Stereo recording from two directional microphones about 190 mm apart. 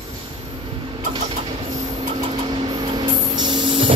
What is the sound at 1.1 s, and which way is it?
Vehicle, 25° right (ahead or behind).